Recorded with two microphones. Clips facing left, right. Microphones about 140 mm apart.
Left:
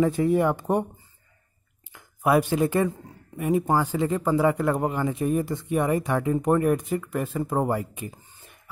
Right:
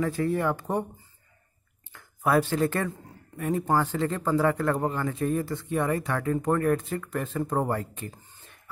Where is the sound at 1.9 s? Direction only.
15° left (ahead or behind).